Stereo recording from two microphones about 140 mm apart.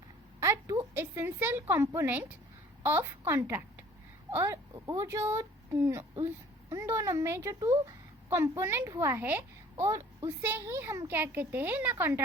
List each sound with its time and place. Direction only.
0.3 s a woman's voice: 20° right (ahead or behind)